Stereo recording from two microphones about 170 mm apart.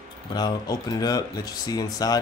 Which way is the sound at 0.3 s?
25° left (ahead or behind).